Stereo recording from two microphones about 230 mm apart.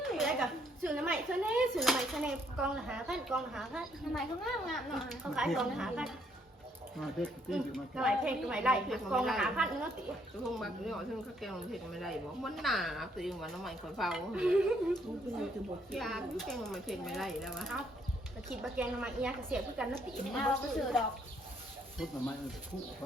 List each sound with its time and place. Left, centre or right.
0.0 s a sound: centre
0.9 s speech: centre
15.9 s speech: centre